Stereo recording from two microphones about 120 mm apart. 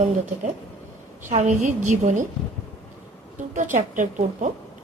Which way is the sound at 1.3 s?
90° right.